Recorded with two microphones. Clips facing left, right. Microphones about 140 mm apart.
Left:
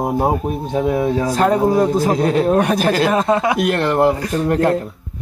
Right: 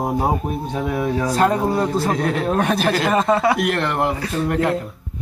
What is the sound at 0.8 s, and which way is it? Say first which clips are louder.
Speech: left 4 dB; 25° left (ahead or behind).